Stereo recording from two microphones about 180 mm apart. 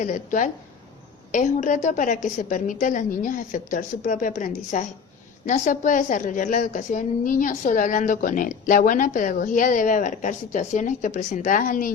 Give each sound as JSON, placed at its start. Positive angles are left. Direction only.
{"t": 0.0, "sound": "a woman's voice", "side_deg": 45}